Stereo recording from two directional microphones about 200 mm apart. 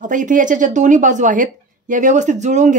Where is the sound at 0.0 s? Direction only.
40° right (ahead or behind).